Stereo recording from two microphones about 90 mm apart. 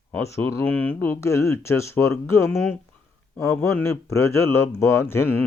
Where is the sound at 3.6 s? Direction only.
25° left (ahead or behind).